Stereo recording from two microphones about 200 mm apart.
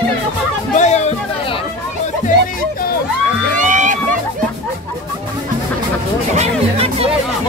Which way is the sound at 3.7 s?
40° right (ahead or behind).